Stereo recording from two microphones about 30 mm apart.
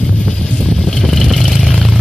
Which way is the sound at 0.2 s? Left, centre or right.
Left.